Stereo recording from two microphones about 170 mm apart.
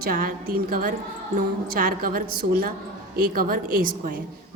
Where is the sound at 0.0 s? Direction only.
55° right (ahead or behind).